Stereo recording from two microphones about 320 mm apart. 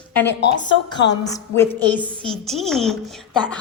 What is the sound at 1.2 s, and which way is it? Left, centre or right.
A woman's voice, centre.